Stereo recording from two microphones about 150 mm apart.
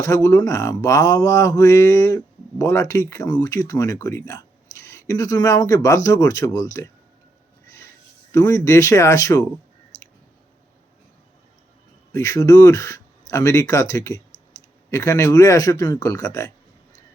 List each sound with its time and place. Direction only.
0.0 s speech: 20° left (ahead or behind)
8.3 s speech: 20° left (ahead or behind)
12.1 s speech: 20° left (ahead or behind)